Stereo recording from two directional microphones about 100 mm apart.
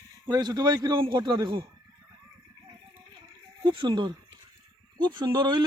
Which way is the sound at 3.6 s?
55° right (ahead or behind).